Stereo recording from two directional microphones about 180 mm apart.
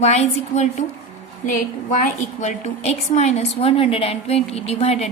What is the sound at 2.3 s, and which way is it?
A woman's voice, 40° left (ahead or behind).